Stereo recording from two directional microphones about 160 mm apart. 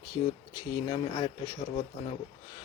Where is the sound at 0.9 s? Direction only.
30° left (ahead or behind).